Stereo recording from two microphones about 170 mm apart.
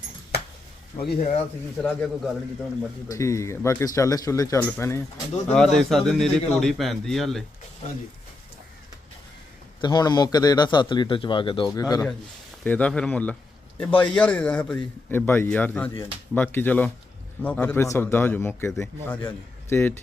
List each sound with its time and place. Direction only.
0.9 s speech: 60° left (ahead or behind)
1.4 s speech: 10° left (ahead or behind)
3.1 s speech: 20° left (ahead or behind)
5.5 s a man's voice: 5° left (ahead or behind)
9.8 s a man's voice: 25° left (ahead or behind)
12.6 s speech: 10° left (ahead or behind)